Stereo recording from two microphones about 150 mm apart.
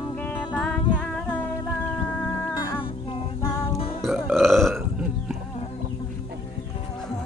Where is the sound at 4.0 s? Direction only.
Centre (ahead or behind).